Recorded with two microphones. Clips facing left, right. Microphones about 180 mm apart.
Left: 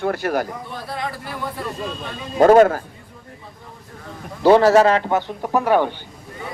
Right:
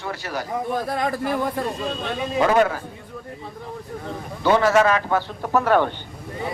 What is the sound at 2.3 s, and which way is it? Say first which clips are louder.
Speech: left 7 dB; 45° left (ahead or behind).